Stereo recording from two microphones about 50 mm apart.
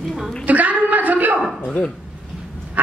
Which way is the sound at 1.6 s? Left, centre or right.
Left.